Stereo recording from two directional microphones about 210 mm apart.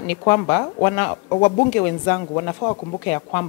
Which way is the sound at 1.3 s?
25° left (ahead or behind).